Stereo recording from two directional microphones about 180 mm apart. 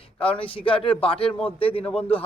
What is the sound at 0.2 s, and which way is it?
A man's voice, 30° left (ahead or behind).